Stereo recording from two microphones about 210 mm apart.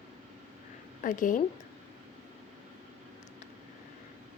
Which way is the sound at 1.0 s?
40° left (ahead or behind).